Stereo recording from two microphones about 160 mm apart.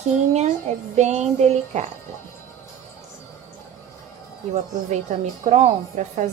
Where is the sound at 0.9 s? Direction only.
45° right (ahead or behind).